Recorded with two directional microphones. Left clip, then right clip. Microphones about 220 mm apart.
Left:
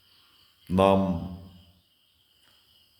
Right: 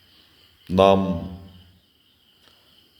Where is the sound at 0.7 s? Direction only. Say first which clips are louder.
Right 5 dB; 15° left (ahead or behind).